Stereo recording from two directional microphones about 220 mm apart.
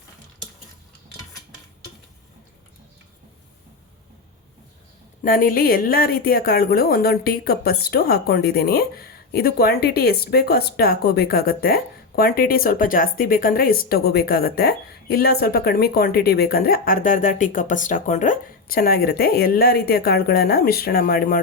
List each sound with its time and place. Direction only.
5.2 s a woman's voice: 40° left (ahead or behind)